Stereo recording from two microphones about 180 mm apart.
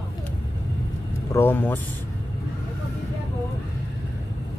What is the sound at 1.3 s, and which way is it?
Speech, 10° left (ahead or behind).